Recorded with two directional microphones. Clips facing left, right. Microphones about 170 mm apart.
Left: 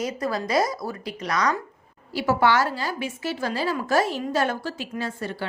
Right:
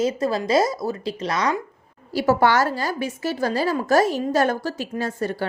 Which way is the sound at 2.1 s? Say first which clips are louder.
Right 3 dB; 40° right (ahead or behind).